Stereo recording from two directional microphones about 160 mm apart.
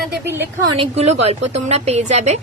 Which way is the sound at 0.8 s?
40° right (ahead or behind).